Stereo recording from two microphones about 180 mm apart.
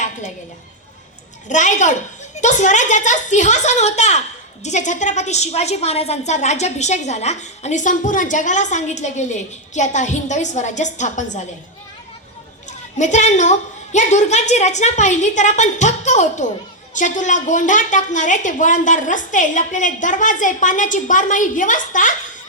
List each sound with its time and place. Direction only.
1.5 s a woman's voice: 45° left (ahead or behind)
13.0 s a woman's voice: 40° left (ahead or behind)